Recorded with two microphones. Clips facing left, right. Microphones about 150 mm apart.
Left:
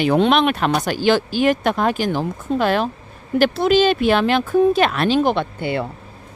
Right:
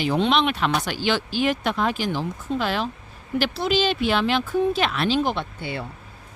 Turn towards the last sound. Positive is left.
turn(degrees=65)  # may be behind; listen again after turning